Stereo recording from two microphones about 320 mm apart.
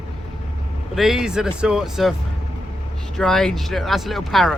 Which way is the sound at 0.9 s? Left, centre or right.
Centre.